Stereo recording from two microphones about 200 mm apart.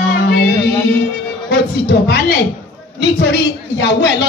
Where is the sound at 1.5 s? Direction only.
55° left (ahead or behind).